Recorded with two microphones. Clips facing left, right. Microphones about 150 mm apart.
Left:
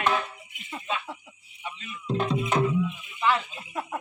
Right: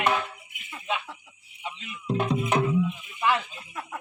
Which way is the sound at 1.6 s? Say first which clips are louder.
Right 1 dB; 15° right (ahead or behind).